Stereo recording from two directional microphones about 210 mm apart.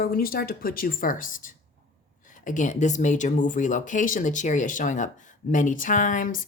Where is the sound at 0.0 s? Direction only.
45° left (ahead or behind).